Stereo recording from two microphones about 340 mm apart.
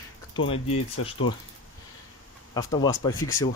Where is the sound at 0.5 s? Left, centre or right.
Left.